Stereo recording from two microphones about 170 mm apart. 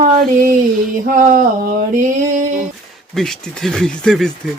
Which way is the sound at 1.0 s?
50° right (ahead or behind).